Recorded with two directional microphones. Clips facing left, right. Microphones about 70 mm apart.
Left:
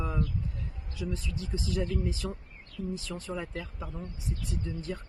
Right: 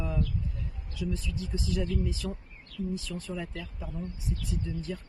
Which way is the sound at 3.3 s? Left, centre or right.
Left.